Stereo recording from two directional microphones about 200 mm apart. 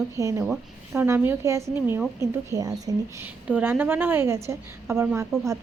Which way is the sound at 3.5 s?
5° right (ahead or behind).